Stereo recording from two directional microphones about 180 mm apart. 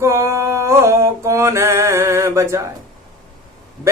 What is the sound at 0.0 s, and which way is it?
Mantra, 15° right (ahead or behind).